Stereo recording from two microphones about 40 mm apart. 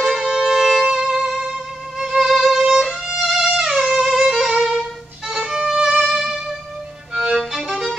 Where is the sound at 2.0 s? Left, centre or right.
Centre.